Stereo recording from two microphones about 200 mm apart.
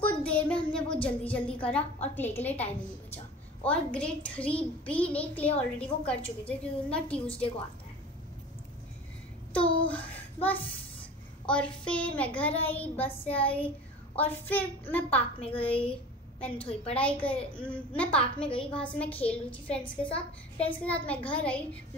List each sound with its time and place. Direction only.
0.0 s a sound: 5° left (ahead or behind)
2.1 s a woman's voice: 10° left (ahead or behind)
9.5 s a child's voice: 5° left (ahead or behind)
19.8 s a woman's voice: 25° left (ahead or behind)
20.6 s a woman's voice: 5° left (ahead or behind)